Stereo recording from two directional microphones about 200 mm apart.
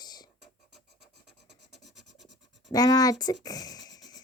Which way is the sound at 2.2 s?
Centre (ahead or behind).